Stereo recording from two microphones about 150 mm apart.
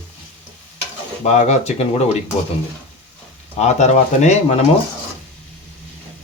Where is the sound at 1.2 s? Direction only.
50° left (ahead or behind).